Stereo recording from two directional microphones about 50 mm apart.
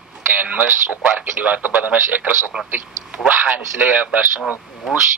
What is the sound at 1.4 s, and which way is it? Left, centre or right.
Speech, right.